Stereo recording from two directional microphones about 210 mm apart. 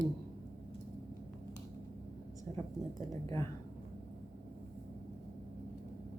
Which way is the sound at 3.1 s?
15° left (ahead or behind).